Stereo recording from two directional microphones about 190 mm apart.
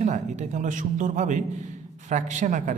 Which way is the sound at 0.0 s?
40° right (ahead or behind).